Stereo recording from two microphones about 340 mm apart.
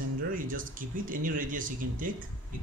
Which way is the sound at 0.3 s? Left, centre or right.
Right.